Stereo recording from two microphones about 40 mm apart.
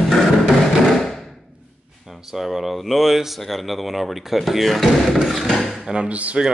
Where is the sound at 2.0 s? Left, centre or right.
Centre.